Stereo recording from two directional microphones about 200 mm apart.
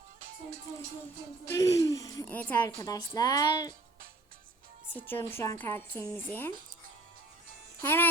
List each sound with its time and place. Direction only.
1.5 s a woman's voice: 15° left (ahead or behind)
4.9 s a woman's voice: 10° left (ahead or behind)
7.8 s speech: 10° left (ahead or behind)